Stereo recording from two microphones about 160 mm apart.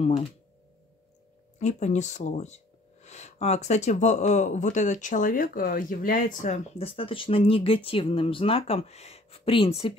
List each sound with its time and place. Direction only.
1.6 s speech: 45° left (ahead or behind)